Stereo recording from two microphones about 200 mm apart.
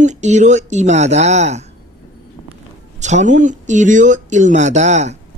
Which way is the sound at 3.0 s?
35° right (ahead or behind).